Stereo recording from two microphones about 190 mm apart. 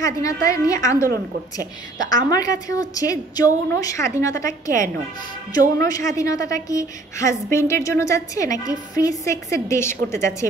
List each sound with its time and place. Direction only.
0.0 s a woman's voice: 15° left (ahead or behind)
2.2 s a woman's voice: 20° left (ahead or behind)
5.8 s a woman's voice: 15° left (ahead or behind)